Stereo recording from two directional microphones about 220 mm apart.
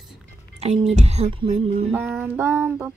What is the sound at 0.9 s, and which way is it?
Speech, 30° right (ahead or behind).